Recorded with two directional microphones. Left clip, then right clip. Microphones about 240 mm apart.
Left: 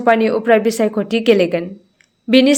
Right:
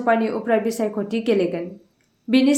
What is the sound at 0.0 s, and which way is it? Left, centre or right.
A woman's voice, left.